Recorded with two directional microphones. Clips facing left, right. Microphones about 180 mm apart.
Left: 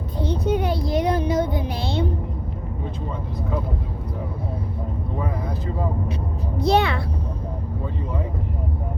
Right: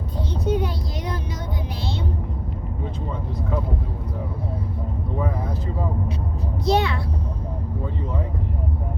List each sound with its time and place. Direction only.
0.2 s speech: 60° left (ahead or behind)
6.6 s a child's voice: 55° left (ahead or behind)